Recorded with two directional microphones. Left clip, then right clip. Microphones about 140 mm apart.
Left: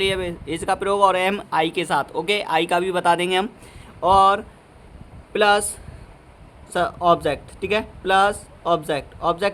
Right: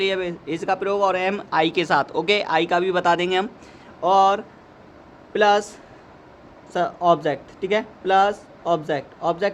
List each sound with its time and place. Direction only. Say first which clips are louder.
0.0 s speech: even; 45° left (ahead or behind)
6.7 s speech: left 1 dB; 40° left (ahead or behind)